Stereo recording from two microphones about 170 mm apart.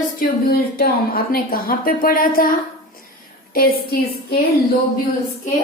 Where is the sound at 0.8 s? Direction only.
60° left (ahead or behind).